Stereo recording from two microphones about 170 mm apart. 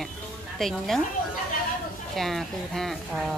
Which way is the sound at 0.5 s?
Centre (ahead or behind).